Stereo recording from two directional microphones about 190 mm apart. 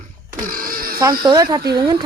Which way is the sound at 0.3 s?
45° right (ahead or behind).